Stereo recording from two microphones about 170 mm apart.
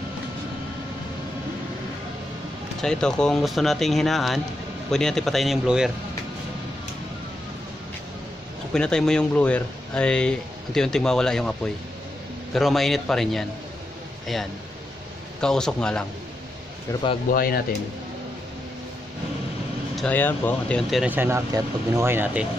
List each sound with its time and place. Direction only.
2.8 s speech: 5° left (ahead or behind)
8.7 s speech: 5° left (ahead or behind)
17.3 s speech: 60° left (ahead or behind)
20.0 s speech: 10° left (ahead or behind)
21.0 s speech: 10° right (ahead or behind)